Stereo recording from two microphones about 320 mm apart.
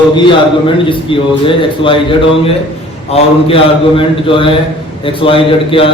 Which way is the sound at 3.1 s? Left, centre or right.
Centre.